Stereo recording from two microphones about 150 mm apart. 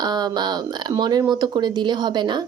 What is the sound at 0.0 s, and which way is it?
Speech, 25° right (ahead or behind).